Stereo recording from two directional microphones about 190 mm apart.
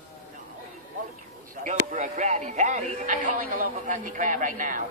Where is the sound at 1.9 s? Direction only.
40° right (ahead or behind).